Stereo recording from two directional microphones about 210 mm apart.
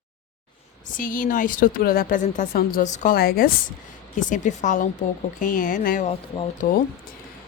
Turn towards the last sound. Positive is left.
turn(degrees=40)  # may be behind; listen again after turning